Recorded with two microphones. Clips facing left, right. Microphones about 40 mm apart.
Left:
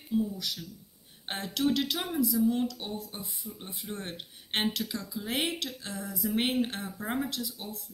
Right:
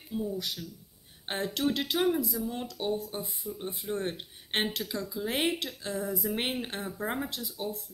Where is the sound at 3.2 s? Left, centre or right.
Right.